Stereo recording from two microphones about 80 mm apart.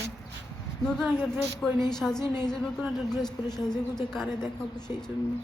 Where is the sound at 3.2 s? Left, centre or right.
Centre.